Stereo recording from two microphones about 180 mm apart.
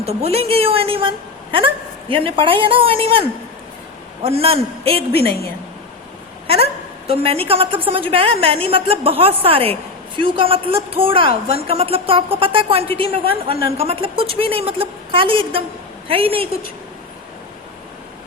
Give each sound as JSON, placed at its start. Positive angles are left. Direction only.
{"t": 0.0, "sound": "a woman's voice", "side_deg": -35}
{"t": 5.1, "sound": "a woman's voice", "side_deg": 60}
{"t": 7.3, "sound": "a woman's voice", "side_deg": -30}